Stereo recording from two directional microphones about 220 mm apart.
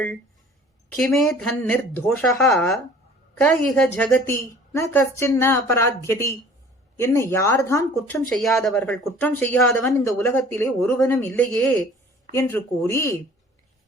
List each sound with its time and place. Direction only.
0.9 s a woman's voice: centre (ahead or behind)